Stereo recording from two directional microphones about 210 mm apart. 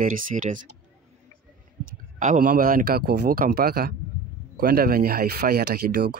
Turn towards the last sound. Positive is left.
turn(degrees=-45)  # may be behind; listen again after turning